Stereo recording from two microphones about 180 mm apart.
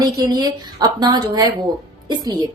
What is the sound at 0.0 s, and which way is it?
A woman's voice, 20° right (ahead or behind).